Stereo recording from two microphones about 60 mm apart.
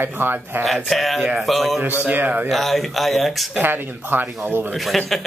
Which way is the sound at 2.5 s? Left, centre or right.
Centre.